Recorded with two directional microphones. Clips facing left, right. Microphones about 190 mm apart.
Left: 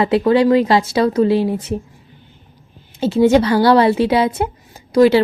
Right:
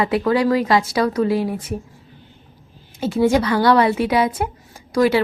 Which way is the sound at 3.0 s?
25° left (ahead or behind).